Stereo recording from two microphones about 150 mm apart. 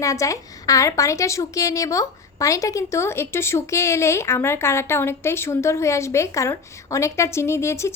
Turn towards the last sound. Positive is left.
turn(degrees=20)  # may be behind; listen again after turning